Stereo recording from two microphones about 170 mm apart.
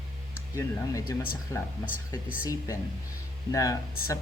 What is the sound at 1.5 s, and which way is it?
Speech, 15° left (ahead or behind).